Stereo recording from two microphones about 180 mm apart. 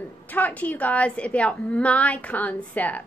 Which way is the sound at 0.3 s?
10° left (ahead or behind).